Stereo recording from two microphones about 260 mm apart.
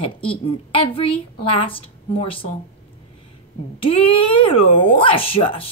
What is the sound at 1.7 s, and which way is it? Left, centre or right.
Speech, left.